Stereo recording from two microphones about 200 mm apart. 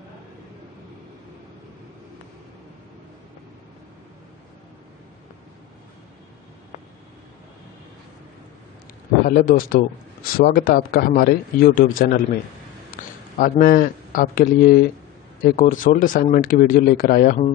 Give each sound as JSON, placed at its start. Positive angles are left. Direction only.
{"t": 9.3, "sound": "a man's voice", "side_deg": 45}